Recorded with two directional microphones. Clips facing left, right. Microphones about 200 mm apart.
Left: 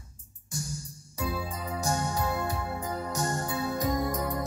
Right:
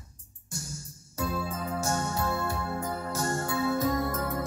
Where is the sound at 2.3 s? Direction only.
20° left (ahead or behind).